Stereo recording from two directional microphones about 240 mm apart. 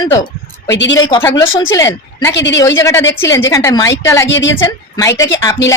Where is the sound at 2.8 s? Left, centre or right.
Centre.